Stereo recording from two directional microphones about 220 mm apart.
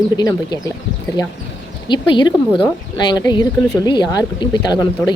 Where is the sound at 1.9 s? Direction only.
20° left (ahead or behind).